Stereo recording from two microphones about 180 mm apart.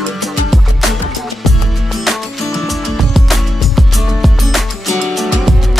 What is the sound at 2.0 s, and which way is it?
Music, centre (ahead or behind).